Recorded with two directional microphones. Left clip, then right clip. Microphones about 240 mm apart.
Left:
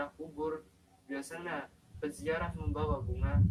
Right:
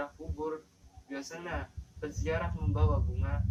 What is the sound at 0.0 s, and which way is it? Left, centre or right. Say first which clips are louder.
Speech: even; centre.